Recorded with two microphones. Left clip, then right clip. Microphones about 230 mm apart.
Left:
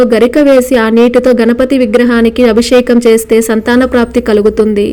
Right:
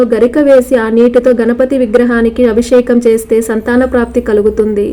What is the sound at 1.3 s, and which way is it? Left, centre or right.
Speech, left.